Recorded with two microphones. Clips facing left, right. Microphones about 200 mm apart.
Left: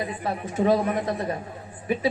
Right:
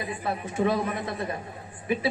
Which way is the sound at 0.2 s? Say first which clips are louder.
Even; 35° left (ahead or behind).